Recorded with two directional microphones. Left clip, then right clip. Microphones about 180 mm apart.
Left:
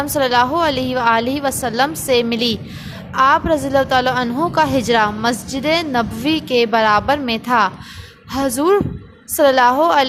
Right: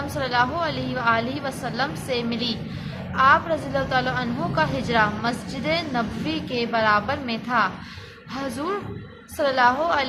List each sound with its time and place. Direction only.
0.2 s a woman's voice: 60° left (ahead or behind)